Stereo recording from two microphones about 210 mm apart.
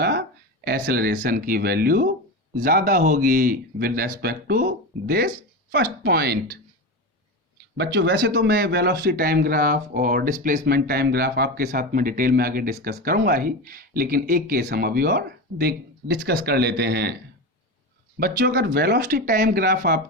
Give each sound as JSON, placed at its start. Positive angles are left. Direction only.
{"t": 0.0, "sound": "speech", "side_deg": -50}
{"t": 7.8, "sound": "speech", "side_deg": -55}
{"t": 18.2, "sound": "speech", "side_deg": -45}